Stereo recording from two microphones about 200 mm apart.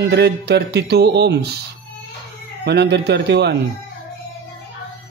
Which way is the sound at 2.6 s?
55° right (ahead or behind).